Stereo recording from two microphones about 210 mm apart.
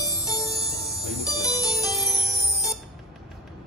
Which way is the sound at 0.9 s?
Centre (ahead or behind).